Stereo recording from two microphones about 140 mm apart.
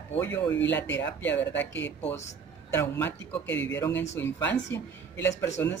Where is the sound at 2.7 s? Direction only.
15° left (ahead or behind).